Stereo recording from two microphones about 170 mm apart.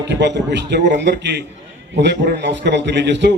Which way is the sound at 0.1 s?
90° right.